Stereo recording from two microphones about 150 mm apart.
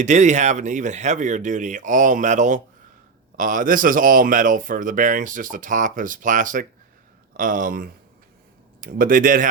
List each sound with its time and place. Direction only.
0.0 s speech: 50° right (ahead or behind)